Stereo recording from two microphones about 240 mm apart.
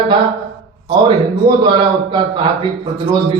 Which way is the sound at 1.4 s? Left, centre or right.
Centre.